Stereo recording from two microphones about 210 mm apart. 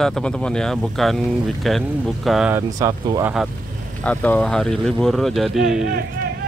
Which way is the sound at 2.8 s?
20° right (ahead or behind).